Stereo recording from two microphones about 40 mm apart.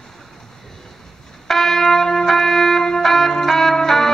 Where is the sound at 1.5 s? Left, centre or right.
Centre.